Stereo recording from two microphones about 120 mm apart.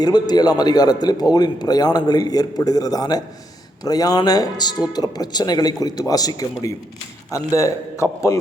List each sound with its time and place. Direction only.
0.0 s a man's voice: 35° left (ahead or behind)